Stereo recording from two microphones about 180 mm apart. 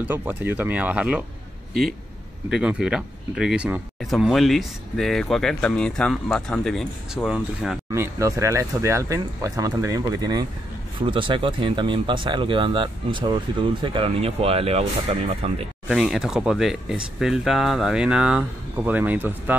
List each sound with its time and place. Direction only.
0.0 s speech: 10° right (ahead or behind)
7.9 s speech: 15° right (ahead or behind); by 15.5 s 35° right (ahead or behind)
16.0 s speech: 5° right (ahead or behind)